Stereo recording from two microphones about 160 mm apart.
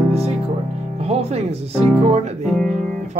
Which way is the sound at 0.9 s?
40° right (ahead or behind).